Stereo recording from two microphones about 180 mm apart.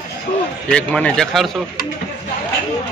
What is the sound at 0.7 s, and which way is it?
Speech, 5° left (ahead or behind).